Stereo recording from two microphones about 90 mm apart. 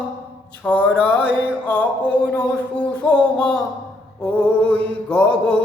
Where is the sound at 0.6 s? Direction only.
15° left (ahead or behind).